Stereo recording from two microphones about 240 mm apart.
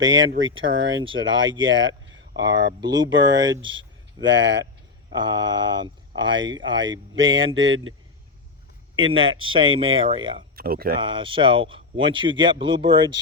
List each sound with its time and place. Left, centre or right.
0.0 s speech: right
2.3 s speech: centre
2.9 s speech: right
3.6 s speech: centre
4.2 s speech: right
5.1 s speech: centre
7.2 s speech: right
9.1 s speech: right
10.5 s speech: right
11.0 s speech: right